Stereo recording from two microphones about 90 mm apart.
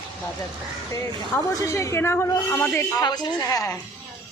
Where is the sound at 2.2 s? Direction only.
40° left (ahead or behind).